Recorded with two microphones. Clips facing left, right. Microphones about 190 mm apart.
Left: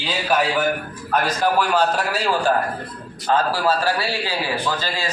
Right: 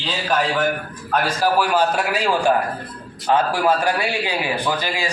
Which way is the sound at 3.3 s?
15° right (ahead or behind).